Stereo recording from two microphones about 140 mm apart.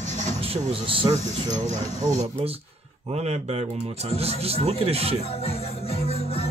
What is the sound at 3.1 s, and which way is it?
Speech, 50° right (ahead or behind).